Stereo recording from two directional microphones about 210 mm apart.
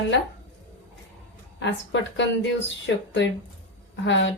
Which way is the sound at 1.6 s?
60° left (ahead or behind).